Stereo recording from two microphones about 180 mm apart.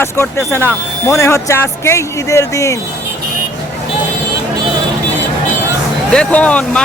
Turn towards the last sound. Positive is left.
turn(degrees=5)  # may be behind; listen again after turning